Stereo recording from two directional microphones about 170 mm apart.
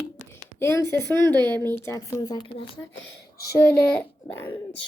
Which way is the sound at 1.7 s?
15° left (ahead or behind).